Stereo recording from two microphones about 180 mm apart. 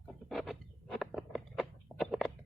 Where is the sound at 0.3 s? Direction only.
Centre (ahead or behind).